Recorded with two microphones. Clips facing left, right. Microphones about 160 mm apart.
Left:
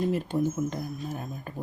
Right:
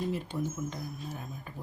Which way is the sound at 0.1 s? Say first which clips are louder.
Left 7 dB; 50° left (ahead or behind).